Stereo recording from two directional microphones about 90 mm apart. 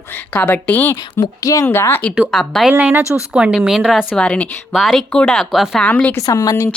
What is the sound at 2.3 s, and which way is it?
Speech, 5° left (ahead or behind).